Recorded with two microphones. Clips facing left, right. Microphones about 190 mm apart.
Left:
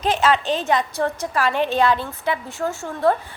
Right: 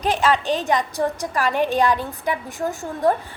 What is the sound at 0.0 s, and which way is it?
A woman's voice, 15° right (ahead or behind).